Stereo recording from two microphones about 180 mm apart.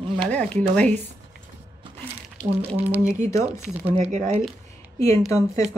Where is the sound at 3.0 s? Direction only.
40° right (ahead or behind).